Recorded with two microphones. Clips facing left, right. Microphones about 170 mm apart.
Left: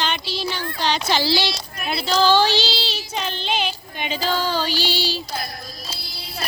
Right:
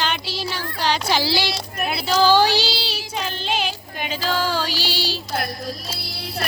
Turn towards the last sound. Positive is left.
turn(degrees=-5)  # may be behind; listen again after turning